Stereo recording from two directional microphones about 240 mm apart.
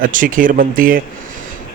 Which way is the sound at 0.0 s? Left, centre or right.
Right.